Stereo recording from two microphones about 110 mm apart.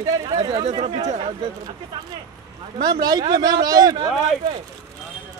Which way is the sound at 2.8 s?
40° right (ahead or behind).